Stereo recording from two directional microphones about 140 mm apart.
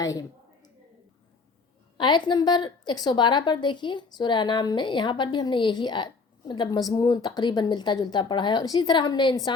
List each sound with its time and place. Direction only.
0.0 s a woman's voice: 25° left (ahead or behind)
2.0 s a woman's voice: 35° left (ahead or behind)